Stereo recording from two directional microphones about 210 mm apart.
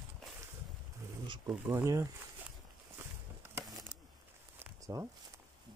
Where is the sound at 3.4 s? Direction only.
15° right (ahead or behind).